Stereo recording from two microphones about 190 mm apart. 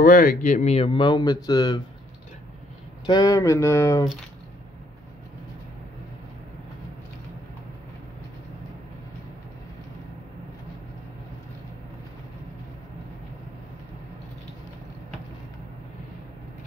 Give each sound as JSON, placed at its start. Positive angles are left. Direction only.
{"t": 0.0, "sound": "speech", "side_deg": 45}
{"t": 3.1, "sound": "speech", "side_deg": 20}